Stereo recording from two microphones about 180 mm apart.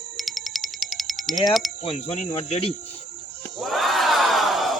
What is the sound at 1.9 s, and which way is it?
Speech, 35° left (ahead or behind).